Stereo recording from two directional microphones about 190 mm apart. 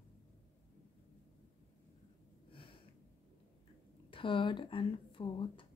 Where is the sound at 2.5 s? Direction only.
25° left (ahead or behind).